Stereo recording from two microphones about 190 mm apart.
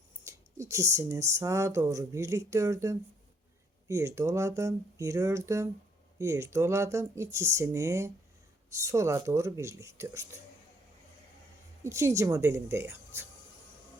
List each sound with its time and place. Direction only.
0.3 s speech: 15° right (ahead or behind)
11.8 s speech: 15° right (ahead or behind)